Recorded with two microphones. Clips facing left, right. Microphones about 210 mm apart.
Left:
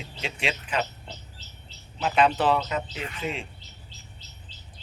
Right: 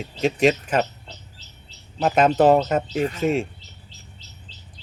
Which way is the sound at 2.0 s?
45° right (ahead or behind).